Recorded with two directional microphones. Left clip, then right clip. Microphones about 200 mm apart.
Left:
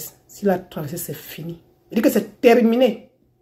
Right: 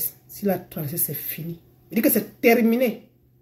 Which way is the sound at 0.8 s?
50° left (ahead or behind).